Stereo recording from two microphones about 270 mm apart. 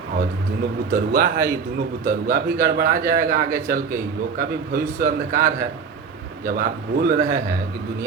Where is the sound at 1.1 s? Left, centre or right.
Right.